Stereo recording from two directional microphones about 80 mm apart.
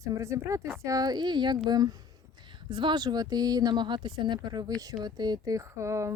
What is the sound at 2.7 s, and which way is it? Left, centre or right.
Speech, right.